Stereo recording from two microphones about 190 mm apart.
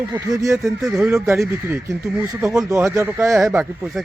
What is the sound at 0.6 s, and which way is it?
A man's voice, centre (ahead or behind).